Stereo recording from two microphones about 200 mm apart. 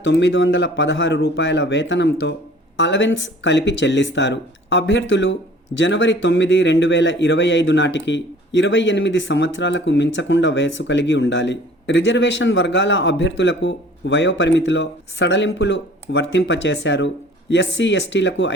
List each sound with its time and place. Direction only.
0.0 s speech: 65° left (ahead or behind)